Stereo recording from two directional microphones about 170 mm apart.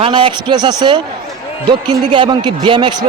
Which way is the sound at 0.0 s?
30° right (ahead or behind).